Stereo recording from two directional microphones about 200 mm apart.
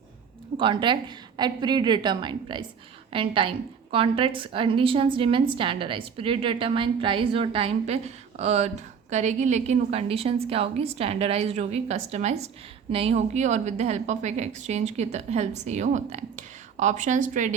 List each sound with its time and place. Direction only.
0.5 s a woman's voice: 25° right (ahead or behind)